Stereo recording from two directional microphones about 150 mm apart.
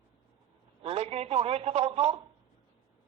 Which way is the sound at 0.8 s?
40° right (ahead or behind).